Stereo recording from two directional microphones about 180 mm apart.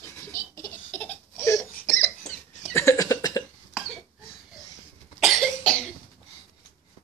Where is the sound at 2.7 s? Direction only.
15° left (ahead or behind).